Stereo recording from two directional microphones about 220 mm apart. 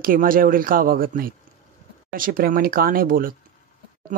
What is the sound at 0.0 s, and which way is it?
Speech, 40° right (ahead or behind).